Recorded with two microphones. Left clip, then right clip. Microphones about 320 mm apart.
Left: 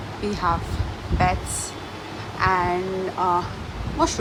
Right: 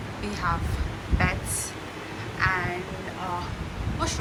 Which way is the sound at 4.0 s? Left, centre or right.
Centre.